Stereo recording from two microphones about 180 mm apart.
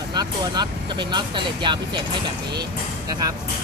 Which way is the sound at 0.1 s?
25° right (ahead or behind).